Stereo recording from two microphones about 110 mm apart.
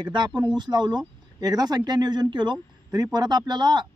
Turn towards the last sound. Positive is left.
turn(degrees=-40)  # may be behind; listen again after turning